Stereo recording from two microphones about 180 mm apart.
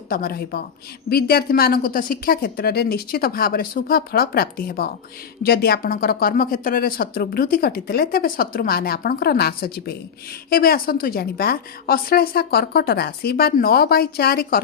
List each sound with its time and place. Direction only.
0.1 s speech: 55° left (ahead or behind)